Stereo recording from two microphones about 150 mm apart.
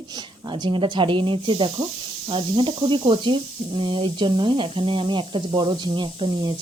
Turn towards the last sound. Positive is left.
turn(degrees=-35)  # may be behind; listen again after turning